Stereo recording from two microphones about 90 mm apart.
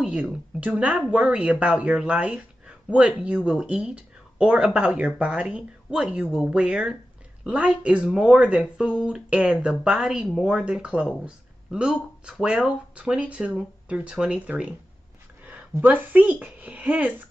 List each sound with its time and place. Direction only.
0.0 s speech: 10° right (ahead or behind)
15.7 s speech: 20° right (ahead or behind)